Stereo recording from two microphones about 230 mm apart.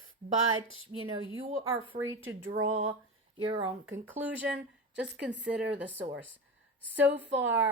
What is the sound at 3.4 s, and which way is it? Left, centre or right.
Speech, right.